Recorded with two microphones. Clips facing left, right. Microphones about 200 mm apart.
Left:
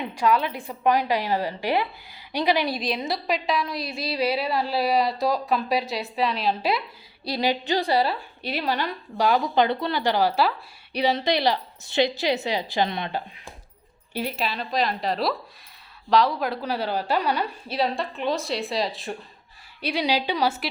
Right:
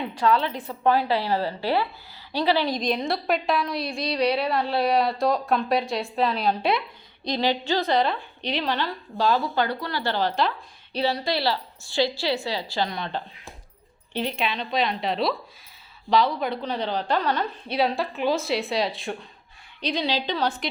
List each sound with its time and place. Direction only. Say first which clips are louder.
0.0 s a woman's voice: even; 10° left (ahead or behind)
17.7 s a woman's voice: right 2 dB; centre (ahead or behind)